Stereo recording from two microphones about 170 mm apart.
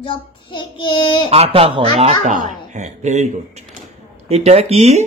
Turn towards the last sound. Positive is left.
turn(degrees=-40)  # may be behind; listen again after turning